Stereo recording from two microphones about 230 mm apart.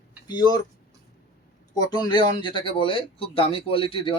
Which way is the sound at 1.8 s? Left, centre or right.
Centre.